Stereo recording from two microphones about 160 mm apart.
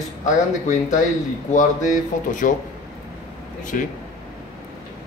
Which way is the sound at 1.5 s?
50° left (ahead or behind).